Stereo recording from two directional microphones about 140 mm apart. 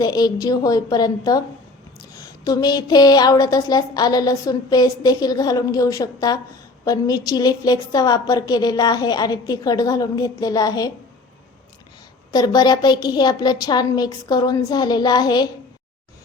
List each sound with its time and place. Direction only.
0.0 s a woman's voice: 30° left (ahead or behind)
12.3 s a woman's voice: 30° left (ahead or behind)